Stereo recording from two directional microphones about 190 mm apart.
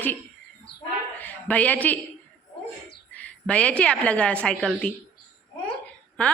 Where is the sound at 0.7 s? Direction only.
60° left (ahead or behind).